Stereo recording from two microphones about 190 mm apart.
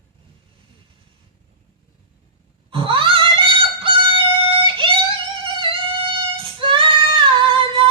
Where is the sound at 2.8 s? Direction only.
25° right (ahead or behind).